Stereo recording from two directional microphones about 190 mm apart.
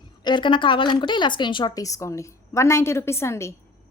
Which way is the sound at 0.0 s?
25° left (ahead or behind).